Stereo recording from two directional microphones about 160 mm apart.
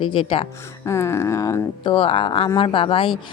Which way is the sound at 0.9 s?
15° left (ahead or behind).